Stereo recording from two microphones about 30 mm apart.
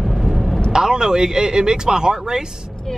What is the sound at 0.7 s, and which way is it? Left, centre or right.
Speech, right.